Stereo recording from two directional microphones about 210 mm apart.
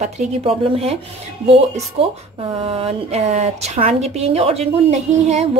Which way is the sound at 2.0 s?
30° right (ahead or behind).